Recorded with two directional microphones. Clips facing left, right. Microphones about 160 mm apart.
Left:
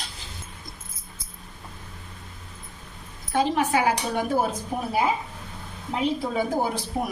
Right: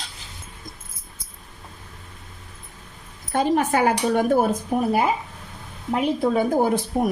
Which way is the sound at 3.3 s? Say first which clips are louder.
Right 2 dB; 50° right (ahead or behind).